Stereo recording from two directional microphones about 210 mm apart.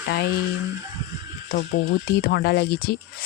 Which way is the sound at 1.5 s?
45° left (ahead or behind).